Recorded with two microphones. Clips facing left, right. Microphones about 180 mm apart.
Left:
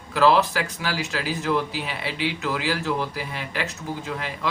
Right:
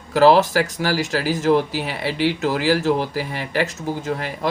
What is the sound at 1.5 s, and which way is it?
Speech, 60° right (ahead or behind).